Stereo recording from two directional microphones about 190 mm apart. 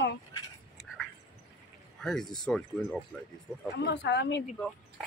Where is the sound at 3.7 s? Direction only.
65° left (ahead or behind).